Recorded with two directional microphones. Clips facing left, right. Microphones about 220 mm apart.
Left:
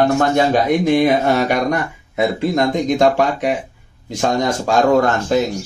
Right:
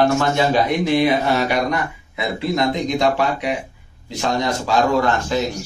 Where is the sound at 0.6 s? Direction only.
45° left (ahead or behind).